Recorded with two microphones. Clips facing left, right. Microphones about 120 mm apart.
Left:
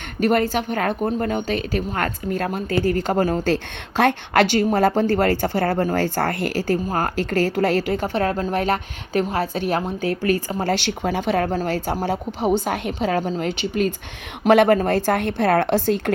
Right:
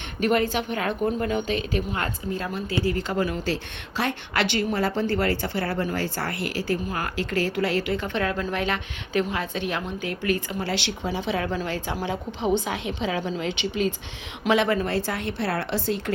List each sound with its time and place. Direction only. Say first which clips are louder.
0.2 s a woman's voice: left 4 dB; 40° left (ahead or behind)
2.3 s speech: left 5 dB; 55° left (ahead or behind)
4.5 s a woman's voice: left 7 dB; 45° left (ahead or behind)